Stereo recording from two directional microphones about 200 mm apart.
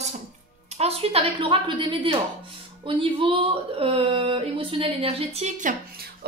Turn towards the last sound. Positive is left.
turn(degrees=-40)  # may be behind; listen again after turning